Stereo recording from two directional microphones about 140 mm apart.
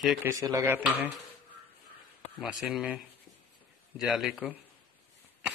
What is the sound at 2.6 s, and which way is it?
A man's voice, 10° right (ahead or behind).